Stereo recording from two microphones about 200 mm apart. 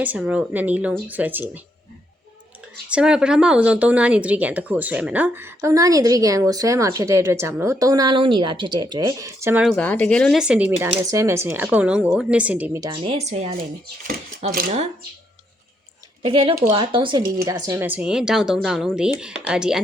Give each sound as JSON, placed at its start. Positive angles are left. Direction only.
{"t": 0.0, "sound": "speech", "side_deg": -5}
{"t": 2.9, "sound": "speech", "side_deg": -5}
{"t": 9.6, "sound": "speech", "side_deg": 5}
{"t": 12.8, "sound": "speech", "side_deg": -25}
{"t": 14.5, "sound": "speech", "side_deg": -45}
{"t": 16.2, "sound": "speech", "side_deg": -25}
{"t": 17.4, "sound": "speech", "side_deg": -15}